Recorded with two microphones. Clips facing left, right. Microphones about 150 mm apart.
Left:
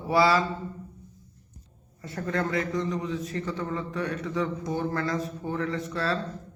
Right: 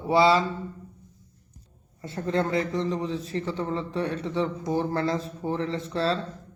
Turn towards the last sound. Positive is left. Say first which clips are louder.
# right 2 dB
turn(degrees=-30)  # may be behind; listen again after turning